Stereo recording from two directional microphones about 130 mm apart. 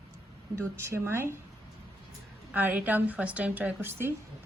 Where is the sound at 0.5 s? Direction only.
20° right (ahead or behind).